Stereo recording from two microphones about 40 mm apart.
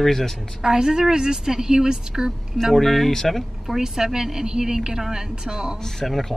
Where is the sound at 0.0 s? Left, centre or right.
Centre.